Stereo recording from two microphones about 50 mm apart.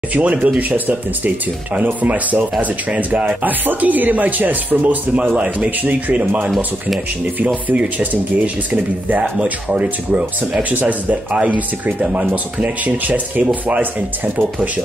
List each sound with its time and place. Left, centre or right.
0.1 s speech: right
3.3 s speech: right
9.7 s speech: right